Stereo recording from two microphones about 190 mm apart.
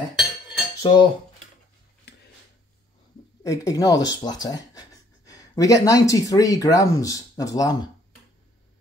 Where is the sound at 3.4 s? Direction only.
15° left (ahead or behind).